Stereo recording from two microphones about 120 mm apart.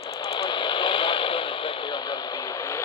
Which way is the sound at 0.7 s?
40° left (ahead or behind).